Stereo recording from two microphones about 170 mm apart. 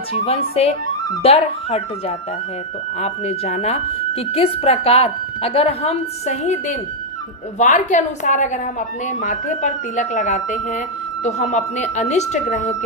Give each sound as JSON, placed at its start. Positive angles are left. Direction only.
{"t": 0.1, "sound": "a woman's voice", "side_deg": 35}